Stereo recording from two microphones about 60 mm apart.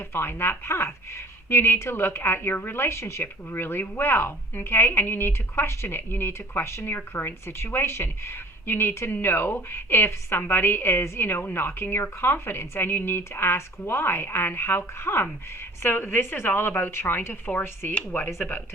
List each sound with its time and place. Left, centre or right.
0.1 s a woman's voice: left
17.9 s speech: left